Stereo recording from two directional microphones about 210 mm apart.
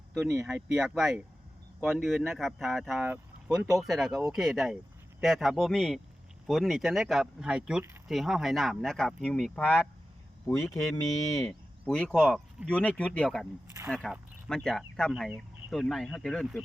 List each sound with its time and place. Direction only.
0.1 s speech: centre (ahead or behind); by 11.4 s 15° left (ahead or behind)
11.4 s speech: 5° left (ahead or behind)